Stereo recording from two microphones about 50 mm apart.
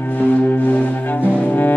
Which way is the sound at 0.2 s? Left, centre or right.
Left.